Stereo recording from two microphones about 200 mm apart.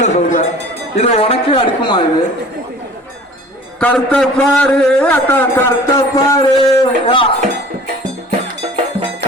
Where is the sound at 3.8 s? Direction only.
5° left (ahead or behind).